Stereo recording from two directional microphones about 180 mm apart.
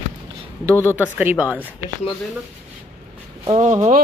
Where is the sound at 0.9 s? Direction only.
10° right (ahead or behind).